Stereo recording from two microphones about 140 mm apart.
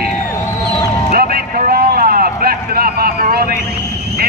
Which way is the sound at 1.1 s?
90° right.